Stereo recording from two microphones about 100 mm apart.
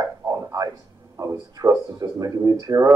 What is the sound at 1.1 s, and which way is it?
Speech, 35° right (ahead or behind).